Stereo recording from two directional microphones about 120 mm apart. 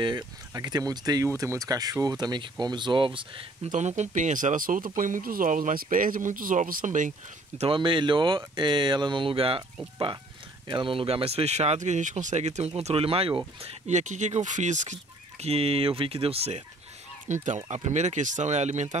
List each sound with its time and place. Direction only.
0.0 s speech: 40° right (ahead or behind)
3.7 s speech: 75° right (ahead or behind); by 7.6 s 90° right
7.6 s speech: 45° right (ahead or behind)
10.7 s speech: 45° right (ahead or behind)
13.8 s speech: 80° right
15.4 s speech: 55° right (ahead or behind)
17.3 s speech: 90° right
17.6 s speech: 70° right (ahead or behind)